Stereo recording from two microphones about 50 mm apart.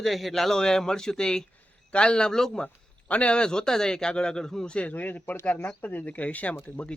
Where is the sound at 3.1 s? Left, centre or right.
Left.